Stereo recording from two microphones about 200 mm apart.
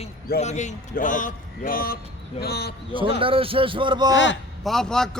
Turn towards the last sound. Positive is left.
turn(degrees=5)  # may be behind; listen again after turning